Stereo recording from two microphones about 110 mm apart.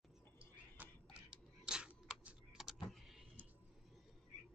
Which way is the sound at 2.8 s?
Centre (ahead or behind).